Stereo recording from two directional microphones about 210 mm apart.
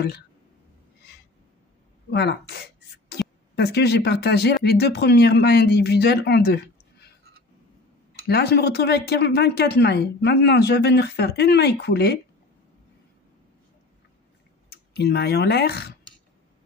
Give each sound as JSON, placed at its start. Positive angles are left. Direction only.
{"t": 2.0, "sound": "speech", "side_deg": 50}
{"t": 8.3, "sound": "speech", "side_deg": 50}
{"t": 14.7, "sound": "speech", "side_deg": 50}